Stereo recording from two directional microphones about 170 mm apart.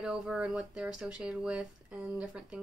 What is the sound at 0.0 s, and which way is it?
Speech, 5° right (ahead or behind).